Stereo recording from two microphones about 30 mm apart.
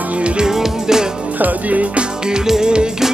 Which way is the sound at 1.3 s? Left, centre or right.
Right.